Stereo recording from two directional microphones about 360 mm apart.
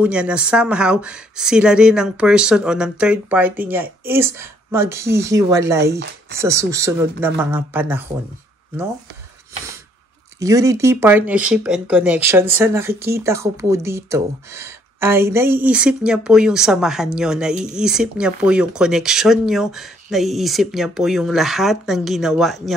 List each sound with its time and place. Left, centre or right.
0.0 s speech: centre
10.4 s speech: centre